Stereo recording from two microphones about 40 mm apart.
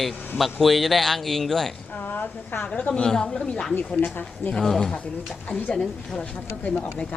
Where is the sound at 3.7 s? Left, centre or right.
Left.